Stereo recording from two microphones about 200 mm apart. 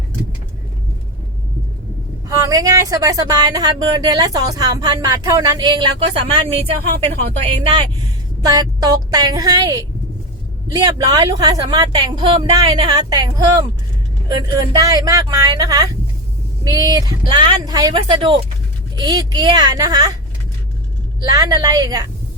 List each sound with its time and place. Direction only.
2.2 s speech: 15° right (ahead or behind)
8.4 s speech: 20° right (ahead or behind)
21.2 s speech: 15° right (ahead or behind)